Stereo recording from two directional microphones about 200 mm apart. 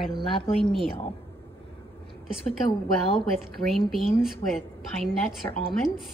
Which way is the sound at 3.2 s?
Centre (ahead or behind).